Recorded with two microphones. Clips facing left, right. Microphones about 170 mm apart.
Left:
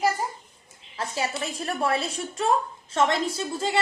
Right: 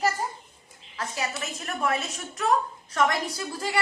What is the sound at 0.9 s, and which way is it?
A woman's voice, 30° left (ahead or behind).